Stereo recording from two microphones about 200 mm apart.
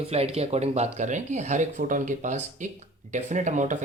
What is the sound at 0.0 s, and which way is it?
Speech, 30° right (ahead or behind).